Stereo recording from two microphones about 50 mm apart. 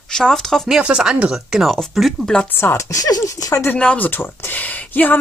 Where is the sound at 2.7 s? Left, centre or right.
Left.